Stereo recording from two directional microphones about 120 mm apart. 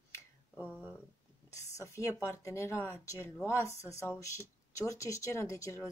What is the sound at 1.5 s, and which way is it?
Speech, 25° left (ahead or behind).